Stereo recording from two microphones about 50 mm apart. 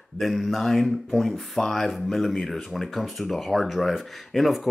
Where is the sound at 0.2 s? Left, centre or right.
Centre.